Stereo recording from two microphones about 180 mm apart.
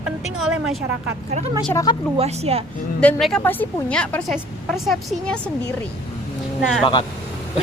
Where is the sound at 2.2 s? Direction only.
35° right (ahead or behind).